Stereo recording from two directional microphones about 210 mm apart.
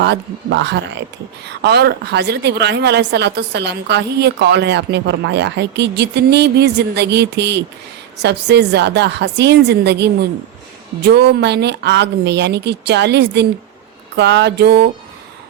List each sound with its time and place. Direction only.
0.0 s a man's voice: 55° right (ahead or behind)